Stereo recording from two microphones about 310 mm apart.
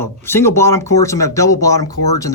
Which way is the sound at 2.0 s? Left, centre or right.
Left.